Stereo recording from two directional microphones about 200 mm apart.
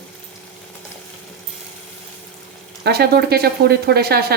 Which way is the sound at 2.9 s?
50° right (ahead or behind).